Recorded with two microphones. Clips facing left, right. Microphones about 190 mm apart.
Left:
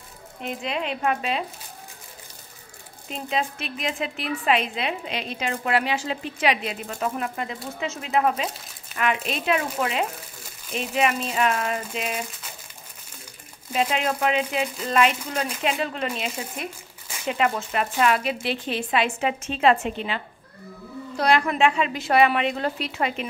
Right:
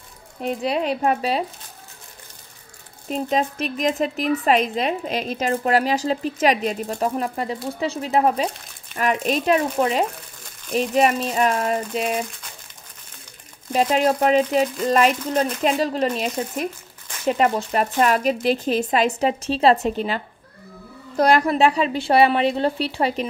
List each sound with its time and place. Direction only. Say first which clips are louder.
0.4 s speech: right 6 dB; 35° right (ahead or behind)
3.1 s a woman's voice: right 6 dB; 40° right (ahead or behind)
13.7 s speech: right 6 dB; 40° right (ahead or behind)
21.2 s speech: right 4 dB; 40° right (ahead or behind)